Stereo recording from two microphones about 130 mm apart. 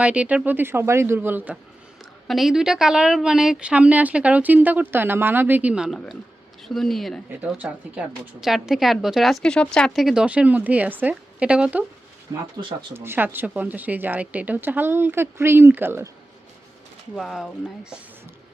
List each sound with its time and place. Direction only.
0.0 s a woman's voice: 10° right (ahead or behind)
2.2 s a woman's voice: centre (ahead or behind)
7.3 s a woman's voice: 10° right (ahead or behind)
12.3 s speech: 30° right (ahead or behind)
12.9 s a woman's voice: 20° right (ahead or behind)
17.2 s speech: centre (ahead or behind)